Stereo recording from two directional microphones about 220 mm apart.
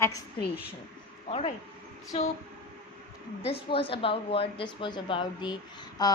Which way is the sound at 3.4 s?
25° left (ahead or behind).